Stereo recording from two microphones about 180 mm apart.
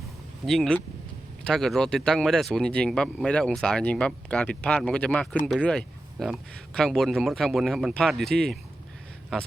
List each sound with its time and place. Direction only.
0.4 s speech: centre (ahead or behind)